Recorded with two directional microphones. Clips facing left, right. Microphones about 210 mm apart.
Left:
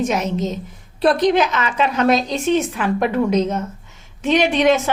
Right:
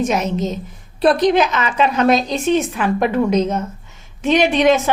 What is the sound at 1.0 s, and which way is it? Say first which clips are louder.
A woman's voice: right 1 dB; 20° right (ahead or behind).